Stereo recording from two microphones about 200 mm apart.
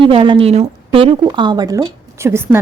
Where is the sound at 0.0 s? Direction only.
25° right (ahead or behind).